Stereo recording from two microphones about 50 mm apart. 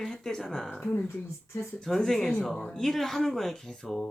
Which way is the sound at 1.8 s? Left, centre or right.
Centre.